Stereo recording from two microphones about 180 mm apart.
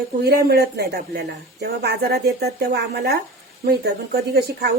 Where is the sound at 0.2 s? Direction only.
60° right (ahead or behind).